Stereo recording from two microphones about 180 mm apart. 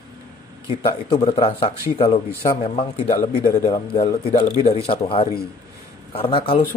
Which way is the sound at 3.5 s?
40° left (ahead or behind).